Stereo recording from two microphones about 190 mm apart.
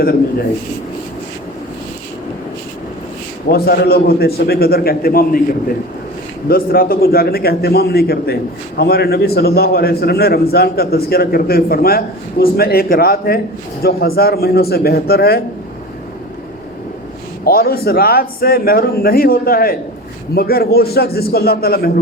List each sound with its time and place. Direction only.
3.5 s a man's voice: 55° left (ahead or behind)
6.5 s a man's voice: 50° left (ahead or behind)
17.4 s a man's voice: 50° left (ahead or behind)